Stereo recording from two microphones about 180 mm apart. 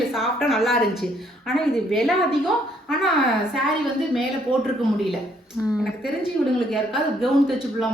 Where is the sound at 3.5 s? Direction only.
Centre (ahead or behind).